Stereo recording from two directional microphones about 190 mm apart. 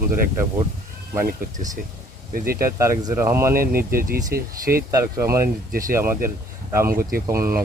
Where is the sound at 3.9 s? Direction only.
50° right (ahead or behind).